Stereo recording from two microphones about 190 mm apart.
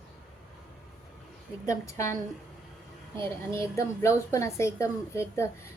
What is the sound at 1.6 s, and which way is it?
Speech, 15° left (ahead or behind).